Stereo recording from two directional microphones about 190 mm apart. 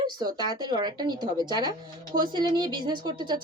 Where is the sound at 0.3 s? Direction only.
20° right (ahead or behind).